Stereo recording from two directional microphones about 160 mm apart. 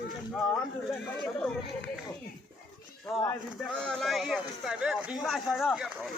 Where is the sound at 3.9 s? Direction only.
Centre (ahead or behind).